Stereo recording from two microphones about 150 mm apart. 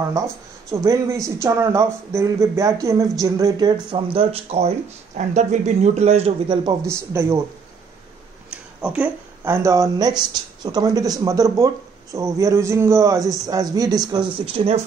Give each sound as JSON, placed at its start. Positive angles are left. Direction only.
{"t": 0.8, "sound": "a man's voice", "side_deg": -20}
{"t": 8.5, "sound": "a man's voice", "side_deg": -10}
{"t": 14.4, "sound": "speech", "side_deg": -40}